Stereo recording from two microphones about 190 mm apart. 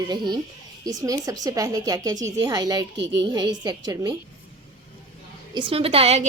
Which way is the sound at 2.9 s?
70° right (ahead or behind).